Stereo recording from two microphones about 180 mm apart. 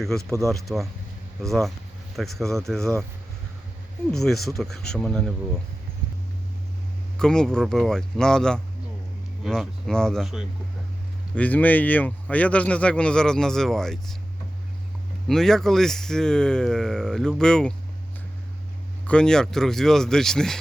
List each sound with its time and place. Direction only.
0.2 s speech: 15° right (ahead or behind)
0.5 s speech: centre (ahead or behind)
4.1 s speech: centre (ahead or behind)
7.2 s speech: 5° left (ahead or behind)
11.3 s speech: 10° left (ahead or behind)
15.3 s speech: 5° left (ahead or behind)
19.0 s speech: 5° left (ahead or behind)